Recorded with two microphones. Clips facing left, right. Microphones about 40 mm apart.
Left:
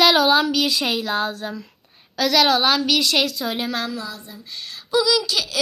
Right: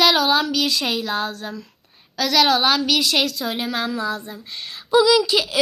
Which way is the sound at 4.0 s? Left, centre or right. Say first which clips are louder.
Right 7 dB; right.